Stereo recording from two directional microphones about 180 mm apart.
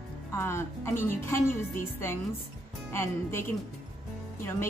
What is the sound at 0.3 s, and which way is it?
A woman's voice, 15° left (ahead or behind).